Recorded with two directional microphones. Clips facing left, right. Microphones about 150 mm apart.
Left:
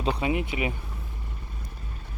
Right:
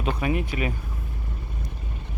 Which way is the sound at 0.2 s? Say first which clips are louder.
Right 1 dB; 20° left (ahead or behind).